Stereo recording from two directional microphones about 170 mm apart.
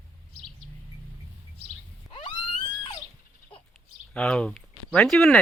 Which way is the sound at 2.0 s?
30° left (ahead or behind).